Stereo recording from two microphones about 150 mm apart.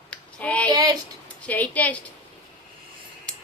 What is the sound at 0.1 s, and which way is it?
Child singing, 10° left (ahead or behind).